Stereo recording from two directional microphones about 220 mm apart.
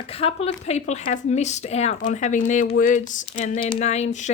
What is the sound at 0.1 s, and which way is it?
Speech, 25° left (ahead or behind).